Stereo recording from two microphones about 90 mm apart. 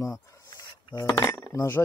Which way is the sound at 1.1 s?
35° left (ahead or behind).